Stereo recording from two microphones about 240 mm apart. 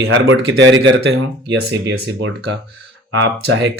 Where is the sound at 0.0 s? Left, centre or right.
Right.